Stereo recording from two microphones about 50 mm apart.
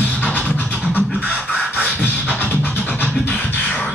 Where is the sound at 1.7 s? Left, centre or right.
Left.